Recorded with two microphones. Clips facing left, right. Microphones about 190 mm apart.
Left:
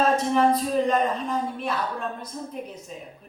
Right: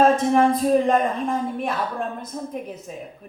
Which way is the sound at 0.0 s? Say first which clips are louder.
Right 4 dB; 50° right (ahead or behind).